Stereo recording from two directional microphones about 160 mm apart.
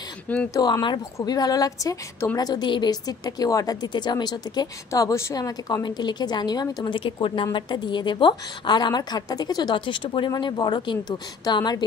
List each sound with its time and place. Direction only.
0.5 s a woman's voice: 25° left (ahead or behind)